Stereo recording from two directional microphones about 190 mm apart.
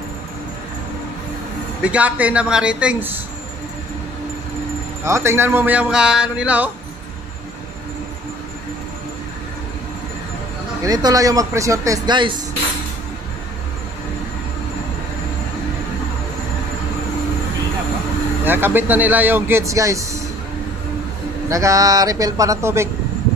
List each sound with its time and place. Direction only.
1.8 s speech: 5° right (ahead or behind)
5.0 s speech: 15° right (ahead or behind)
10.9 s speech: 20° right (ahead or behind)
18.4 s speech: 10° right (ahead or behind)
21.5 s speech: 15° right (ahead or behind)